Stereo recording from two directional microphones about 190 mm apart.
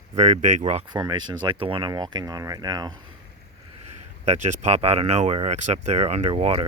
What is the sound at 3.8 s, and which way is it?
Speech, 35° right (ahead or behind).